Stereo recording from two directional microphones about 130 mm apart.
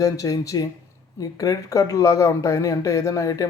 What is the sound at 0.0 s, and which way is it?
Speech, 25° left (ahead or behind).